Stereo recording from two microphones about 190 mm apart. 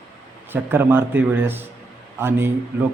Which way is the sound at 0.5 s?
10° right (ahead or behind).